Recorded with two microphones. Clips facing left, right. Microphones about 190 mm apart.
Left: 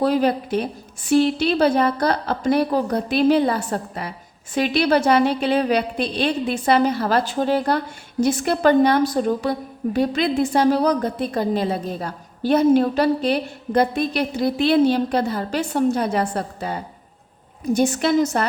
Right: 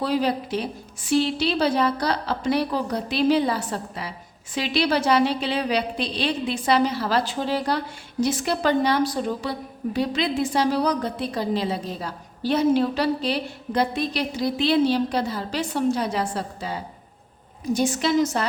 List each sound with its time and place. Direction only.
0.0 s a woman's voice: 50° left (ahead or behind)